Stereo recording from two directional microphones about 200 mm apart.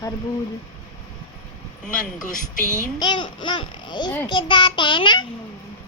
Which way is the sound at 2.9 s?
20° left (ahead or behind).